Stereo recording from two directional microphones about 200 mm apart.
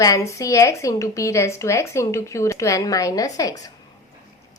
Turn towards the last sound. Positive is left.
turn(degrees=15)  # may be behind; listen again after turning